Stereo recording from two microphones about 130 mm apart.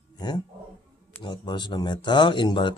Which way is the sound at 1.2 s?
35° left (ahead or behind).